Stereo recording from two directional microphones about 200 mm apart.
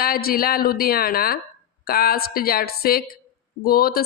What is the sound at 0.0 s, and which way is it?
A woman's voice, 50° left (ahead or behind).